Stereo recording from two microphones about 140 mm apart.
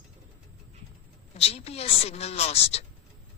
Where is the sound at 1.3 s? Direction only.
45° left (ahead or behind).